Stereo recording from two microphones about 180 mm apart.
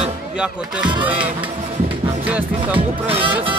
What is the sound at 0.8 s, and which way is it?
Speech, 25° right (ahead or behind).